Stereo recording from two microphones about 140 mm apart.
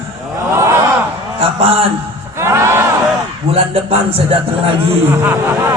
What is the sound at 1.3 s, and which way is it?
Speech, 45° right (ahead or behind).